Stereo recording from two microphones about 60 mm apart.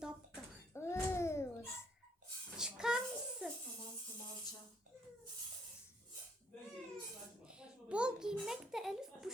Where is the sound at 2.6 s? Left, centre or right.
Centre.